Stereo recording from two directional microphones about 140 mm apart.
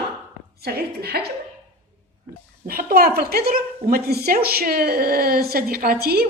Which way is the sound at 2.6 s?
90° right.